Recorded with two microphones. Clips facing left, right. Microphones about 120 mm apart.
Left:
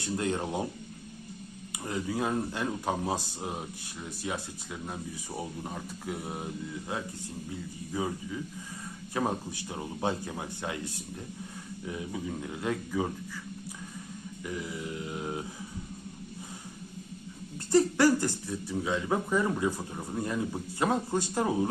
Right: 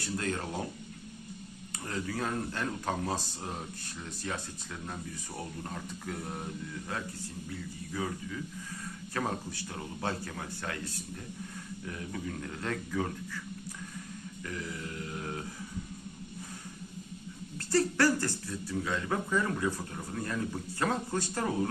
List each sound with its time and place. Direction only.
0.0 s speech: 20° left (ahead or behind)
1.7 s speech: 15° left (ahead or behind)
14.4 s a sound: 15° left (ahead or behind)
17.7 s speech: 15° left (ahead or behind)